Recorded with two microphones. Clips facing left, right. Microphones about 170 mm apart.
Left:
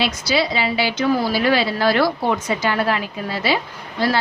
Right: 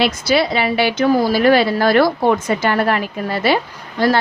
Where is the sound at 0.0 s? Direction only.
55° right (ahead or behind).